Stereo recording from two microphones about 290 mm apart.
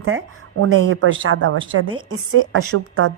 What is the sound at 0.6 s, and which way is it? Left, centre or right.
A woman's voice, right.